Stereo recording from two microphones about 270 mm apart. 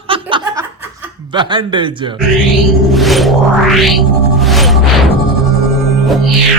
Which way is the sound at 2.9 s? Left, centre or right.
Centre.